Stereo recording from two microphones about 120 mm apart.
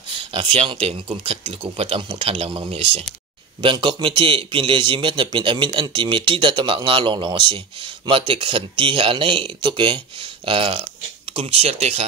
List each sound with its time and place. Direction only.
0.3 s speech: 45° right (ahead or behind)
11.3 s speech: 60° right (ahead or behind)